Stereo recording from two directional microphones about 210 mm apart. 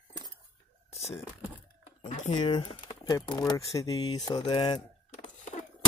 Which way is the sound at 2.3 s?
20° left (ahead or behind).